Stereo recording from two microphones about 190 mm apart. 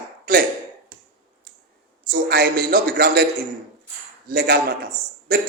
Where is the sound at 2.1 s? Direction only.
55° right (ahead or behind).